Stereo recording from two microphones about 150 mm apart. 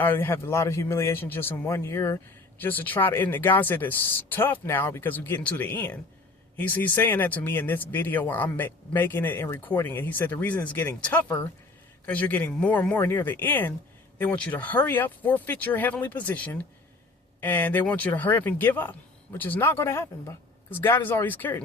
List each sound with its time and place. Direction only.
0.0 s speech: 15° left (ahead or behind)